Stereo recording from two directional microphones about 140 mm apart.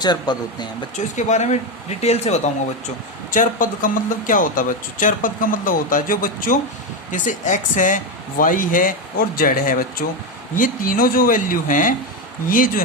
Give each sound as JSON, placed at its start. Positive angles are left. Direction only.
{"t": 0.0, "sound": "speech", "side_deg": 30}
{"t": 1.1, "sound": "speech", "side_deg": 55}
{"t": 3.3, "sound": "speech", "side_deg": 70}
{"t": 7.1, "sound": "speech", "side_deg": 65}